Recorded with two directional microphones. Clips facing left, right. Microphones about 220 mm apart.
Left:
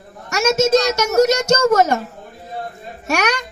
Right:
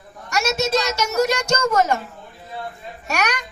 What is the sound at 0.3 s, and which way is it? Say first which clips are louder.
A woman's voice: left 6 dB; 45° left (ahead or behind).